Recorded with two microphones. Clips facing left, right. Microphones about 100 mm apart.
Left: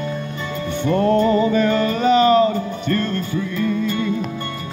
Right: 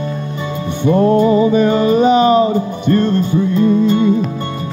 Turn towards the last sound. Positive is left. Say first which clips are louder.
# right 9 dB
turn(degrees=-25)  # may be behind; listen again after turning